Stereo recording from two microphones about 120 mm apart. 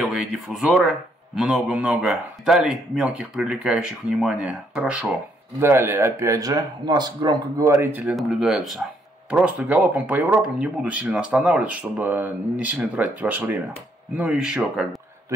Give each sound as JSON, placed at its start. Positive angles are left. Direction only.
{"t": 0.0, "sound": "speech", "side_deg": -5}
{"t": 5.6, "sound": "speech", "side_deg": -20}
{"t": 8.2, "sound": "speech", "side_deg": -5}